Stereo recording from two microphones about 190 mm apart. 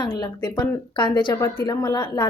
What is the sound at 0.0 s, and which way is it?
A woman's voice, 20° left (ahead or behind).